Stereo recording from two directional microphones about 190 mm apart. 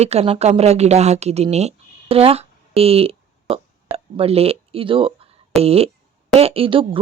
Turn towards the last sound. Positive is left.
turn(degrees=-30)  # may be behind; listen again after turning